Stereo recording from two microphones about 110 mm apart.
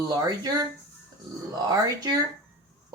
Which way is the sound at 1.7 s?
35° right (ahead or behind).